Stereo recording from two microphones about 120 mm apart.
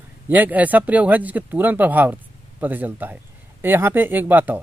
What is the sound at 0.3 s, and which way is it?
Speech, 15° right (ahead or behind).